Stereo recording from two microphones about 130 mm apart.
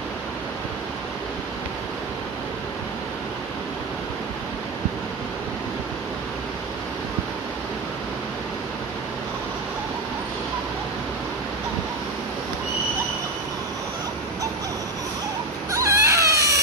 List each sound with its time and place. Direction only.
15.7 s baby cry: 25° right (ahead or behind)